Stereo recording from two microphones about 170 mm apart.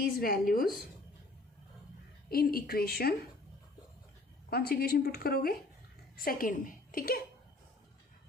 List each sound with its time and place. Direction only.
0.0 s a woman's voice: 60° left (ahead or behind)
2.3 s a woman's voice: 60° left (ahead or behind)
4.4 s a woman's voice: 65° left (ahead or behind)